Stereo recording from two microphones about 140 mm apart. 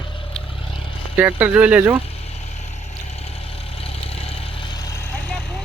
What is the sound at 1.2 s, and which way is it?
Speech, 10° right (ahead or behind).